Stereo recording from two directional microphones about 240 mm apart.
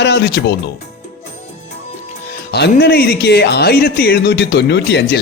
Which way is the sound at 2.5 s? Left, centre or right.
Left.